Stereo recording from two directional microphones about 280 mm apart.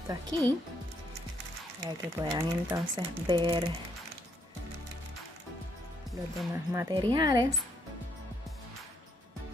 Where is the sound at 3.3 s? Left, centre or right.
Centre.